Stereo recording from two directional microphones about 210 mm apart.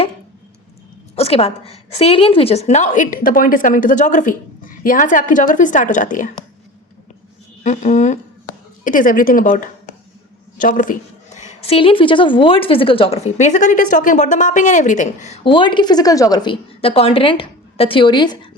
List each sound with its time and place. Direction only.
1.1 s a woman's voice: 30° left (ahead or behind)
7.6 s a woman's voice: 35° left (ahead or behind)